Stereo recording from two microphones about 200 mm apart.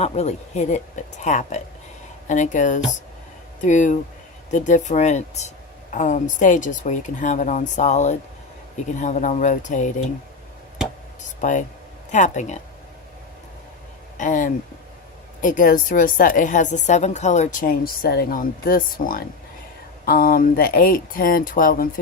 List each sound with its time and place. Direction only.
0.0 s speech: 35° left (ahead or behind)
11.3 s speech: 40° left (ahead or behind)
14.2 s speech: 40° left (ahead or behind)